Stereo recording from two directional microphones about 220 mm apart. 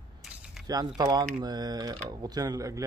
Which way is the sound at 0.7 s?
15° right (ahead or behind).